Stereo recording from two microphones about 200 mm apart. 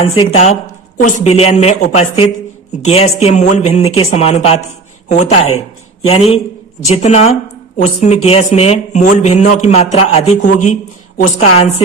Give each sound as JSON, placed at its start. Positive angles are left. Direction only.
{"t": 0.0, "sound": "a man's voice", "side_deg": 30}
{"t": 5.5, "sound": "a sound", "side_deg": 90}
{"t": 6.1, "sound": "a man's voice", "side_deg": 30}